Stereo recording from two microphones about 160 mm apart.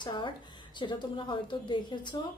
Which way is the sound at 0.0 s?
30° left (ahead or behind).